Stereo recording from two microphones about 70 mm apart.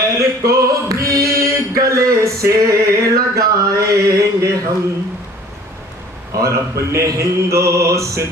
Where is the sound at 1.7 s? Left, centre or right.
Right.